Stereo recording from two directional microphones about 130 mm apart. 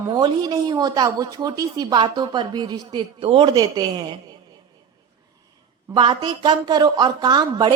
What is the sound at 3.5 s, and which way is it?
Speech, 30° right (ahead or behind).